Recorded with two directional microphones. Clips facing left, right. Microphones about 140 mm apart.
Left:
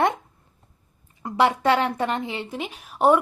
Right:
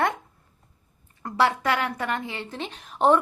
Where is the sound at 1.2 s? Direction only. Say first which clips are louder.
Left 3 dB; 20° left (ahead or behind).